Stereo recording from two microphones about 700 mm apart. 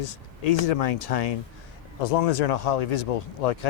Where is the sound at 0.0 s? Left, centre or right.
Left.